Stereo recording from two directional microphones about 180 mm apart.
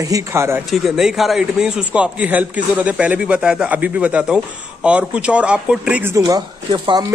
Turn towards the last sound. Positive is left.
turn(degrees=-25)  # may be behind; listen again after turning